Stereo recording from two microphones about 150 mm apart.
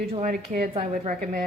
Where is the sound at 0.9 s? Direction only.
60° right (ahead or behind).